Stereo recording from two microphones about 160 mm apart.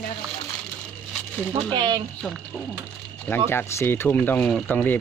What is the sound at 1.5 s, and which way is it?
Speech, 25° right (ahead or behind).